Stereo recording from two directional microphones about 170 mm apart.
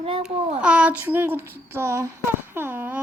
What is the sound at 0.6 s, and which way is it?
Speech, 5° right (ahead or behind).